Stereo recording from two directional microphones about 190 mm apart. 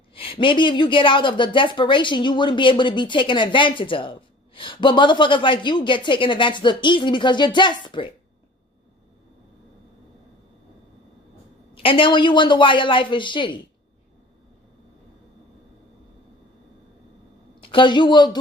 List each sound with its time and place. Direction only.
0.1 s a woman's voice: 30° left (ahead or behind)
11.7 s a woman's voice: 30° left (ahead or behind)
17.6 s speech: 25° left (ahead or behind)